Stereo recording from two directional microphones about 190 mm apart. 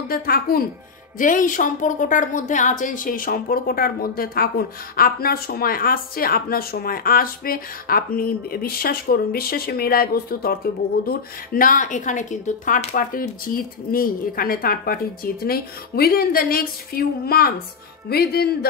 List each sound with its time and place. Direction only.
0.1 s a woman's voice: 50° left (ahead or behind)